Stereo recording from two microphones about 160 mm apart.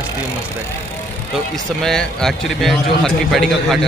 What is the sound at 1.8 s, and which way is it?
A man's voice, centre (ahead or behind).